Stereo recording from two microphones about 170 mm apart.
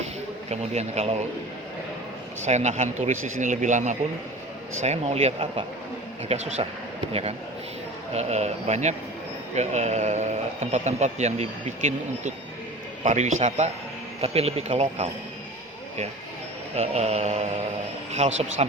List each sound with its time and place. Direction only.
0.5 s speech: 40° right (ahead or behind)
2.5 s a man's voice: 40° right (ahead or behind)
16.7 s speech: 40° right (ahead or behind)